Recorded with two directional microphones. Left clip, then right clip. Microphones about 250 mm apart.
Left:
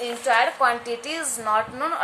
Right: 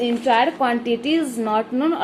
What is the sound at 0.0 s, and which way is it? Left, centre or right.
A woman's voice, centre.